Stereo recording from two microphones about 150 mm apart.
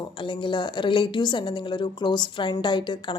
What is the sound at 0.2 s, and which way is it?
Speech, 35° left (ahead or behind).